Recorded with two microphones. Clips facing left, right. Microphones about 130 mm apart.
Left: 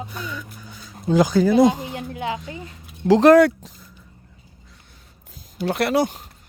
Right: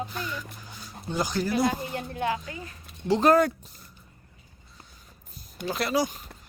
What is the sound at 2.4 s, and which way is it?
Speech, 25° left (ahead or behind).